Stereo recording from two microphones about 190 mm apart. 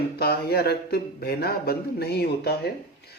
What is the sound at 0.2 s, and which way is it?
Speech, 55° left (ahead or behind).